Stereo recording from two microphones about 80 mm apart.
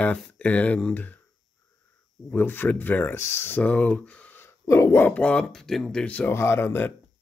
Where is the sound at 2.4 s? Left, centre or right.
Left.